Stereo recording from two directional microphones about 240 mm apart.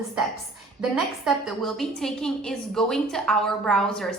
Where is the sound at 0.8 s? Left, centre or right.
Centre.